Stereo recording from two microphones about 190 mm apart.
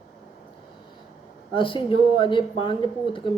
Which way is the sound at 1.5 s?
25° left (ahead or behind).